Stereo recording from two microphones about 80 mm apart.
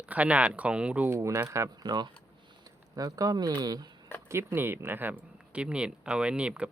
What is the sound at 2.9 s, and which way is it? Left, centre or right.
Speech, right.